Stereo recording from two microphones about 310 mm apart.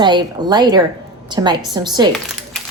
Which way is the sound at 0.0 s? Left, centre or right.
Centre.